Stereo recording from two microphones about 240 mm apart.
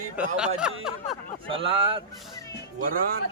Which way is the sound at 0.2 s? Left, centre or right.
Centre.